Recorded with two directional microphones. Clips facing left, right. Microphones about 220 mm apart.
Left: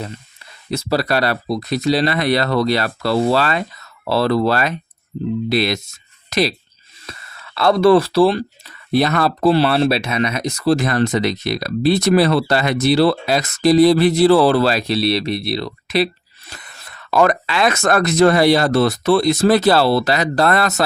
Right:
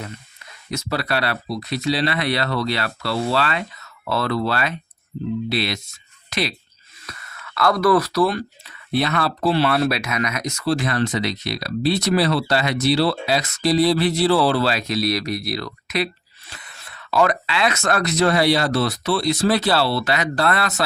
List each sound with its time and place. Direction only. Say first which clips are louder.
0.7 s speech: left 5 dB; 35° left (ahead or behind)
7.1 s speech: left 2 dB; 30° left (ahead or behind)
16.5 s speech: left 3 dB; 45° left (ahead or behind)